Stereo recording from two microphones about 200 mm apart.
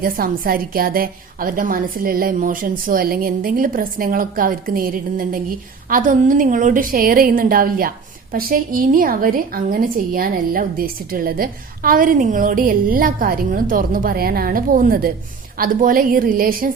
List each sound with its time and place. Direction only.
0.0 s a woman's voice: 45° right (ahead or behind)